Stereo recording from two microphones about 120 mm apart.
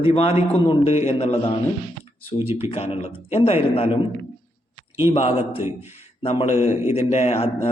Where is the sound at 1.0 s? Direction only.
60° left (ahead or behind).